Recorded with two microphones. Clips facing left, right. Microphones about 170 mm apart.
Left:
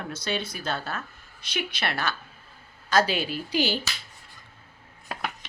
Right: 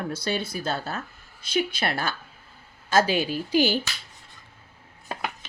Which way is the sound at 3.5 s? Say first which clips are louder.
Right 4 dB; 50° right (ahead or behind).